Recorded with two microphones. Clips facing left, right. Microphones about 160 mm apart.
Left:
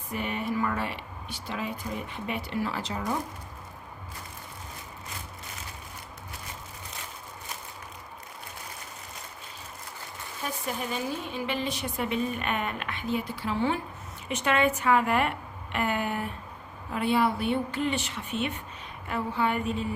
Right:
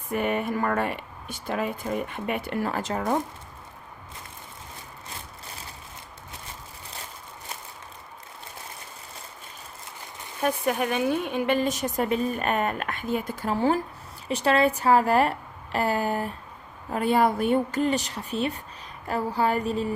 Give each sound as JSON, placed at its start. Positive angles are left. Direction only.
{"t": 0.1, "sound": "a woman's voice", "side_deg": -55}
{"t": 10.4, "sound": "a woman's voice", "side_deg": -65}